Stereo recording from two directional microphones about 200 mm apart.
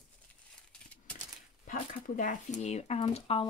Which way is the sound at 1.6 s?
40° left (ahead or behind).